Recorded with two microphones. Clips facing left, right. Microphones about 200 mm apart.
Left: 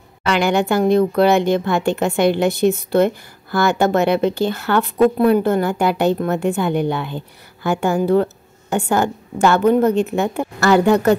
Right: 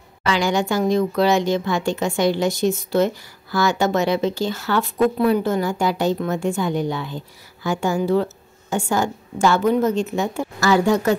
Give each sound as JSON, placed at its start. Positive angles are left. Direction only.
{"t": 0.3, "sound": "speech", "side_deg": 60}